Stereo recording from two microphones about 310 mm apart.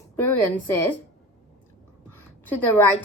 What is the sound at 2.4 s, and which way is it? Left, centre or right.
Speech, centre.